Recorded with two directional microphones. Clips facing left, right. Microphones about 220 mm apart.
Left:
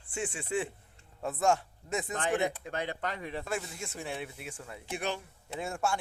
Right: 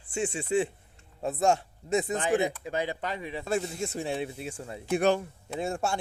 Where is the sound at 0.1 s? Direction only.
25° right (ahead or behind).